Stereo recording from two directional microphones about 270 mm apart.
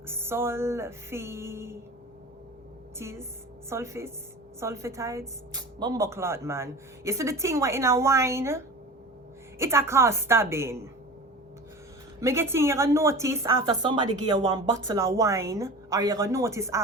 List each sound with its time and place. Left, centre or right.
0.1 s speech: centre
3.0 s speech: centre
12.2 s speech: centre